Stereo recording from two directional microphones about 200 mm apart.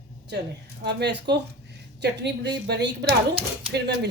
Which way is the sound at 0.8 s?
55° right (ahead or behind).